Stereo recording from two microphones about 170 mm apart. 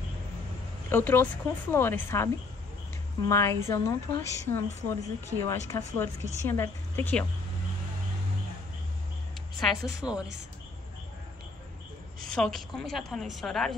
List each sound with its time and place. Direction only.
0.8 s a woman's voice: 15° left (ahead or behind)
9.6 s a woman's voice: centre (ahead or behind)
12.4 s a woman's voice: centre (ahead or behind)